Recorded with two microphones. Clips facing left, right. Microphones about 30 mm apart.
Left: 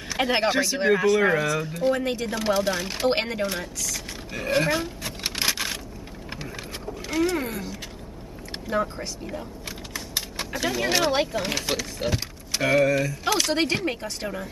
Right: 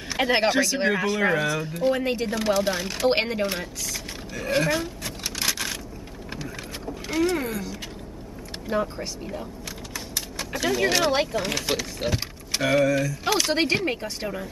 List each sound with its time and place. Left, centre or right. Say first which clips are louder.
0.1 s speech: right 1 dB; centre
0.5 s speech: right 1 dB; centre
1.0 s speech: left 2 dB; centre
4.5 s speech: even; centre
5.2 s vehicle: left 2 dB; left
7.1 s speech: right 1 dB; centre
8.6 s speech: even; centre
10.5 s speech: right 2 dB; centre